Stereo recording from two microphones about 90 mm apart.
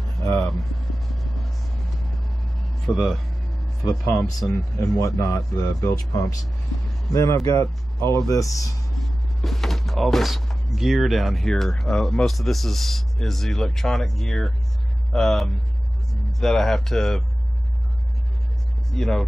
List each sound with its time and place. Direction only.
0.5 s speech: centre (ahead or behind)
2.9 s speech: centre (ahead or behind)
5.0 s speech: 45° left (ahead or behind)
7.1 s speech: 40° left (ahead or behind)
9.0 s speech: centre (ahead or behind)
18.9 s speech: 5° left (ahead or behind)